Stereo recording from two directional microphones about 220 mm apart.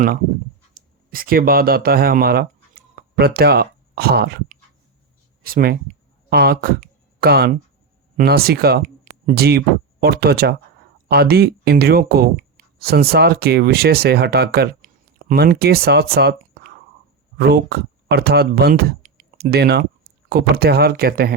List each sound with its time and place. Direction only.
1.1 s speech: 40° right (ahead or behind)